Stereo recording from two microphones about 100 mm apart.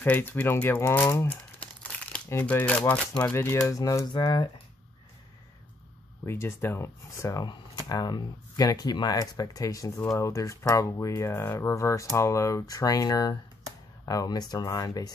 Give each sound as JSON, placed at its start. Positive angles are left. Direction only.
{"t": 0.0, "sound": "speech", "side_deg": 20}
{"t": 3.3, "sound": "speech", "side_deg": 25}
{"t": 4.1, "sound": "speech", "side_deg": 50}
{"t": 6.2, "sound": "speech", "side_deg": 25}